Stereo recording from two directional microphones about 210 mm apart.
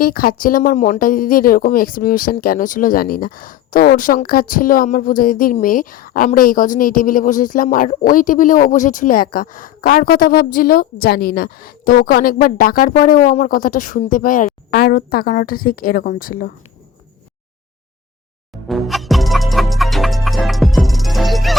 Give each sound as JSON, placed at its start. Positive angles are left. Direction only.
{"t": 0.0, "sound": "speech", "side_deg": 45}
{"t": 18.7, "sound": "music", "side_deg": 0}